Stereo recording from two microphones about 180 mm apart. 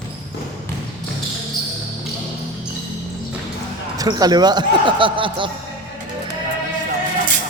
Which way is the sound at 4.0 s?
20° right (ahead or behind).